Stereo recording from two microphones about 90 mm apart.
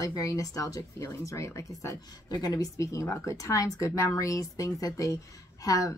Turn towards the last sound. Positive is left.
turn(degrees=40)  # may be behind; listen again after turning